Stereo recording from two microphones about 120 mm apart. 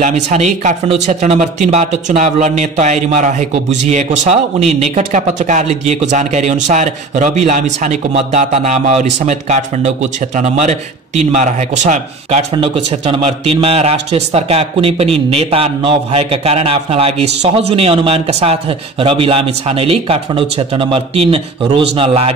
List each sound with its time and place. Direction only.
0.0 s speech: 80° right
8.1 s a man's voice: 70° right (ahead or behind)
12.5 s a man's voice: 55° right (ahead or behind)